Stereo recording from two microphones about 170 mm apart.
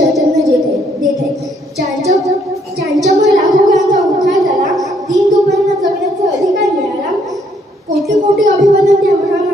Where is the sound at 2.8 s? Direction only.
Centre (ahead or behind).